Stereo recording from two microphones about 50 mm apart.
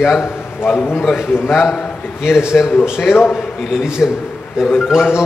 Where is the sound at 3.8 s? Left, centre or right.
Centre.